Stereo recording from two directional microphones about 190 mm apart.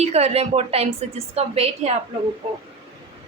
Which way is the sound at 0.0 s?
35° right (ahead or behind).